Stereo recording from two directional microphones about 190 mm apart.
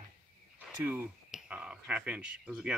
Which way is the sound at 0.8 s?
5° right (ahead or behind).